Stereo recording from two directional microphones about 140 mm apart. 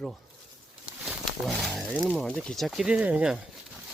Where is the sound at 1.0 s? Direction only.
Centre (ahead or behind).